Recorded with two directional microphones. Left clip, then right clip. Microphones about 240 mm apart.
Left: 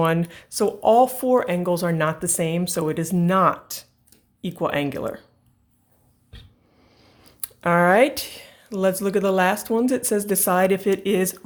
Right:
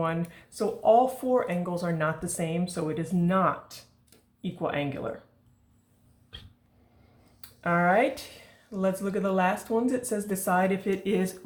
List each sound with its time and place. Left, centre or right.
0.0 s speech: left
7.4 s speech: left